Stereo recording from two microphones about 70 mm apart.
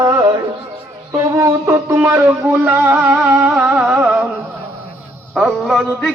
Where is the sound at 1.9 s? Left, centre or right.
Right; by 4.2 s centre.